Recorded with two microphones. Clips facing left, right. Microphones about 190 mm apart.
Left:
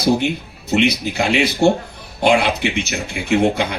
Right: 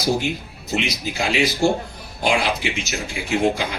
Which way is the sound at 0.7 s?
65° left (ahead or behind).